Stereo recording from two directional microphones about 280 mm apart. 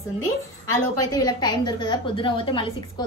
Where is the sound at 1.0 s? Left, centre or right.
Centre.